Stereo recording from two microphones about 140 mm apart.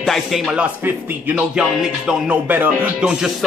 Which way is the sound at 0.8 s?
15° right (ahead or behind).